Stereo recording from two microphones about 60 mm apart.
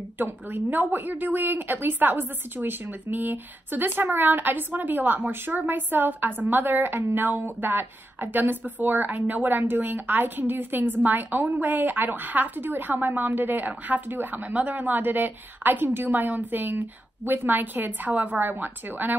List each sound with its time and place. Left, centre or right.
0.2 s a woman's voice: right